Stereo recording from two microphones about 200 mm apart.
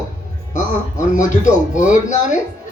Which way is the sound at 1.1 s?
40° left (ahead or behind).